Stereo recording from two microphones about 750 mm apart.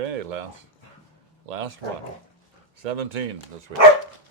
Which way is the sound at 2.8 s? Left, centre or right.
Right.